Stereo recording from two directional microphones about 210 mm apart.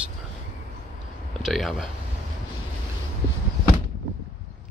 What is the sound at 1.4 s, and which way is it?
Speech, centre (ahead or behind).